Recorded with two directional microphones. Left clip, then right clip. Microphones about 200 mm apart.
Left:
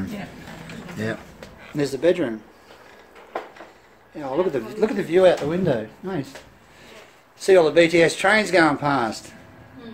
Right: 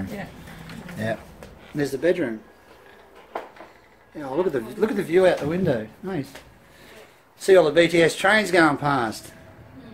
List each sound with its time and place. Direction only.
1.8 s speech: 15° left (ahead or behind)
4.1 s speech: 10° left (ahead or behind)
7.3 s speech: centre (ahead or behind)